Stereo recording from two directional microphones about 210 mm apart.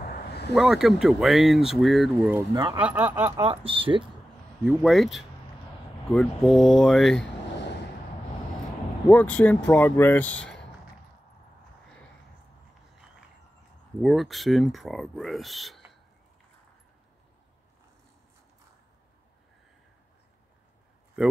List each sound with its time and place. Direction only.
0.0 s a sound: 45° left (ahead or behind)
0.6 s speech: centre (ahead or behind)
2.5 s speech: 20° right (ahead or behind)
2.8 s speech: 5° right (ahead or behind)
3.3 s speech: 25° right (ahead or behind)
4.6 s speech: centre (ahead or behind)
9.1 s speech: 5° left (ahead or behind)
14.0 s speech: centre (ahead or behind)